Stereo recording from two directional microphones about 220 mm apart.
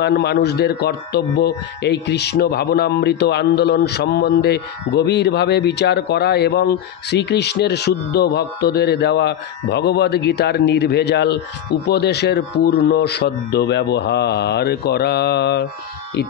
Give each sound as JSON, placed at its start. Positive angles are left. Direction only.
{"t": 0.0, "sound": "a man's voice", "side_deg": 50}